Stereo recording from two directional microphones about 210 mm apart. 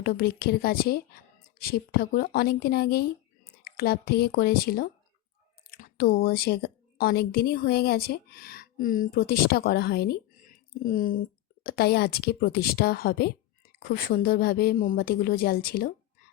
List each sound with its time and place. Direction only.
0.0 s a woman's voice: 50° left (ahead or behind)